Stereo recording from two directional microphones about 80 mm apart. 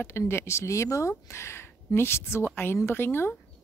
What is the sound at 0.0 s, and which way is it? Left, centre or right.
Speech, left.